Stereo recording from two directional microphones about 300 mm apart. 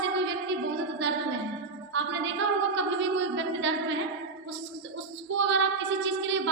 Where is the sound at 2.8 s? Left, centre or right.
Right.